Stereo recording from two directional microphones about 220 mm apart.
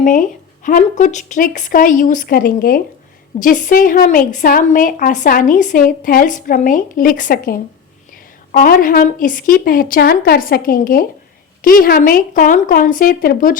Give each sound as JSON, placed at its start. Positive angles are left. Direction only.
{"t": 0.0, "sound": "a woman's voice", "side_deg": 35}